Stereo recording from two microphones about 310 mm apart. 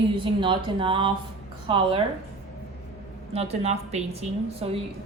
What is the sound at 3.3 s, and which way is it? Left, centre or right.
A woman's voice, centre.